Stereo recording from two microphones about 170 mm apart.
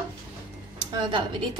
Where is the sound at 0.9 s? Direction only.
25° right (ahead or behind).